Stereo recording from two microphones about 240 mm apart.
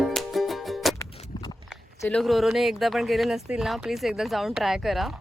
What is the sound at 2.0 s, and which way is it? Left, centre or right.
Speech, centre.